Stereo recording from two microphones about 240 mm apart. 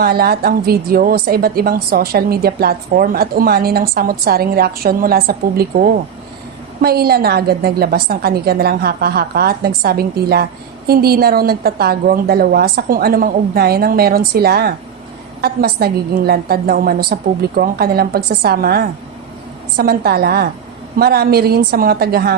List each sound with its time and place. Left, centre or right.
0.0 s a woman's voice: right